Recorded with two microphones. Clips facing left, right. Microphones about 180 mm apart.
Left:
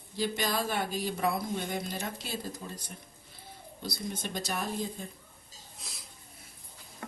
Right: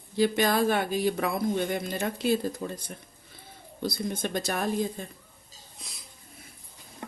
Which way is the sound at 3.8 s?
55° right (ahead or behind).